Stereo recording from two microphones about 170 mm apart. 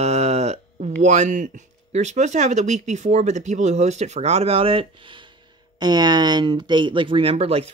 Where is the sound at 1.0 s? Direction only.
45° right (ahead or behind).